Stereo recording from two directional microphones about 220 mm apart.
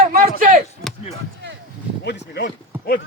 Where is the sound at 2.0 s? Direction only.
50° left (ahead or behind).